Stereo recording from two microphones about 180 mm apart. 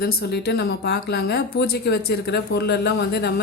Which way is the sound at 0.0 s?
65° left (ahead or behind).